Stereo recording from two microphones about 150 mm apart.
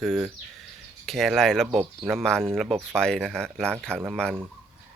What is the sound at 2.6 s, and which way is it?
Speech, 10° right (ahead or behind).